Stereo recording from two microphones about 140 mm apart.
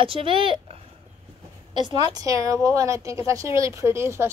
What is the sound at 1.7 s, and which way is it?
A woman's voice, 30° right (ahead or behind).